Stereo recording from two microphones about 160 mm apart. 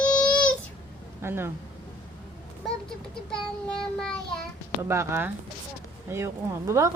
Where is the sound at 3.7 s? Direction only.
5° left (ahead or behind).